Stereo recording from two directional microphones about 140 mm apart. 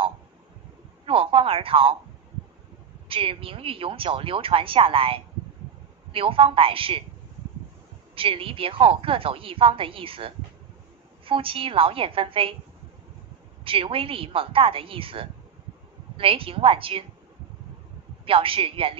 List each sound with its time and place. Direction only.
1.0 s a woman's voice: 40° right (ahead or behind)
3.1 s a woman's voice: 40° right (ahead or behind)
8.1 s a woman's voice: 40° right (ahead or behind)
13.7 s a woman's voice: 40° right (ahead or behind)
18.2 s a woman's voice: 40° right (ahead or behind)